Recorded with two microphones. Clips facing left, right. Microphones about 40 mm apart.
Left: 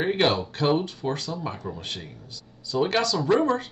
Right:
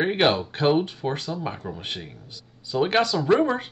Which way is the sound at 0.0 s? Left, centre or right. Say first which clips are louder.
Right 2 dB; right.